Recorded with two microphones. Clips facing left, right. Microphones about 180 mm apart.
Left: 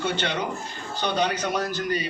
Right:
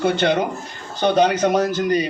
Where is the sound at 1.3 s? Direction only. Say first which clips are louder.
Right 9 dB; 45° right (ahead or behind).